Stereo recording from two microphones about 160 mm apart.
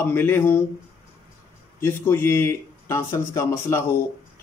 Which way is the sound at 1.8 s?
15° left (ahead or behind).